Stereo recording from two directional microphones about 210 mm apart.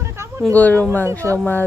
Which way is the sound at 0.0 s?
15° right (ahead or behind).